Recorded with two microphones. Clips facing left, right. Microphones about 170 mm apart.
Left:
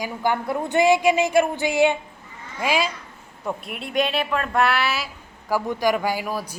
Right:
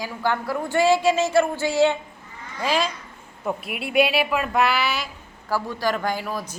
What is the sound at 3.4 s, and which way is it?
Speech, 5° right (ahead or behind).